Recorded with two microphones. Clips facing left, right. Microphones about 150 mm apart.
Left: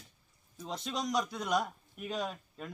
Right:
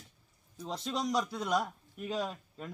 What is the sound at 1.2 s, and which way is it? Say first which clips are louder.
A man's voice: even; 5° right (ahead or behind).